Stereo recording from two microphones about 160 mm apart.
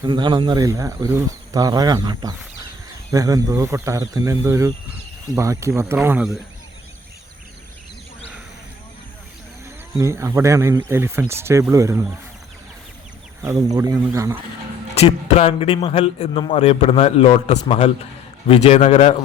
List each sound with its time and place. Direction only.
0.0 s speech: 30° right (ahead or behind)
10.0 s speech: 20° right (ahead or behind)
13.4 s speech: 20° right (ahead or behind)
14.9 s a man's voice: 40° left (ahead or behind)